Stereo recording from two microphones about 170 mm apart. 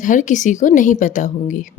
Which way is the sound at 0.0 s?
50° left (ahead or behind).